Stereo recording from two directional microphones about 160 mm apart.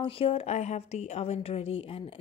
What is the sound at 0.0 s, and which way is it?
A woman's voice, 35° left (ahead or behind).